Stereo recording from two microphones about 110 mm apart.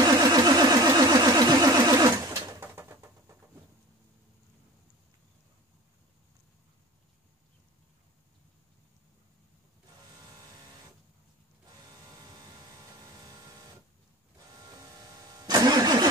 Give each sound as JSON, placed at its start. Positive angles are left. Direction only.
{"t": 0.0, "sound": "vehicle", "side_deg": -35}
{"t": 2.6, "sound": "bird", "side_deg": -20}
{"t": 12.3, "sound": "vehicle", "side_deg": -35}
{"t": 15.4, "sound": "vehicle", "side_deg": -35}